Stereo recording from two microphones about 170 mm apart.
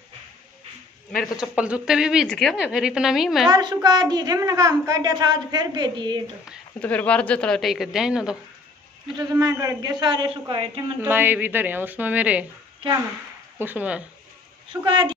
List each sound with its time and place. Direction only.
1.2 s a woman's voice: 5° right (ahead or behind)
3.4 s a woman's voice: 25° right (ahead or behind)
6.8 s a woman's voice: 10° left (ahead or behind)
9.2 s a woman's voice: 20° right (ahead or behind)
11.0 s a woman's voice: 10° right (ahead or behind)
13.6 s a woman's voice: 10° right (ahead or behind)
14.9 s a woman's voice: 30° right (ahead or behind)